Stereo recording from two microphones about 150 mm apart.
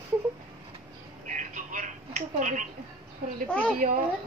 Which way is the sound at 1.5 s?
55° right (ahead or behind).